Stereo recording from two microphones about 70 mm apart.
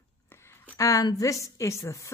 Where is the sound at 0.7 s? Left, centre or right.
Left.